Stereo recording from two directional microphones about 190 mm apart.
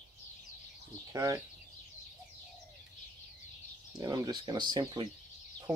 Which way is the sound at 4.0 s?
20° right (ahead or behind).